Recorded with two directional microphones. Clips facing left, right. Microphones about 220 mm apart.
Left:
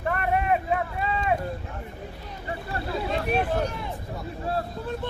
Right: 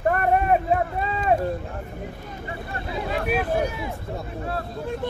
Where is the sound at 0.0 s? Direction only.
40° right (ahead or behind).